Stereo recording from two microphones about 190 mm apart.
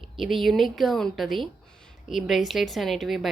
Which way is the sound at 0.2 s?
Centre (ahead or behind).